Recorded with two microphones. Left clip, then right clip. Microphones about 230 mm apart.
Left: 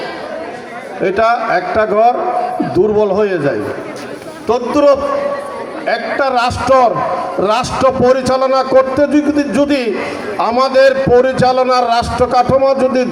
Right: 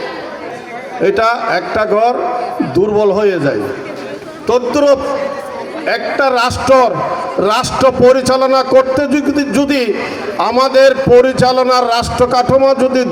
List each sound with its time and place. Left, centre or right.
1.0 s a man's voice: right